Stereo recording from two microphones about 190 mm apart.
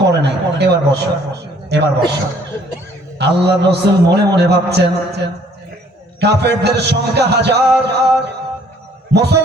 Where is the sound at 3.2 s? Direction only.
60° right (ahead or behind).